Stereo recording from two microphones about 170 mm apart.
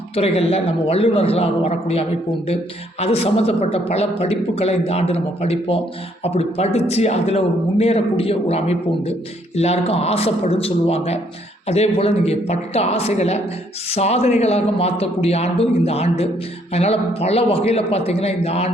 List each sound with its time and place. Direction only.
0.2 s a man's voice: 35° left (ahead or behind)